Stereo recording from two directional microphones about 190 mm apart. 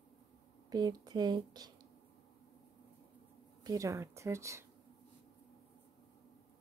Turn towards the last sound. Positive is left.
turn(degrees=-15)  # may be behind; listen again after turning